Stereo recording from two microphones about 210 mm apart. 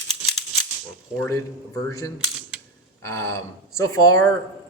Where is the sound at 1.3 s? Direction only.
15° left (ahead or behind).